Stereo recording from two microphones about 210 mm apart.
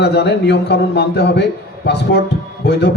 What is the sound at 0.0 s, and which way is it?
A man's voice, 50° left (ahead or behind).